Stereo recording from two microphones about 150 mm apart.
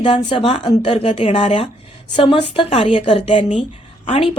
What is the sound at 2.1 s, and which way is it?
Speech, 35° left (ahead or behind).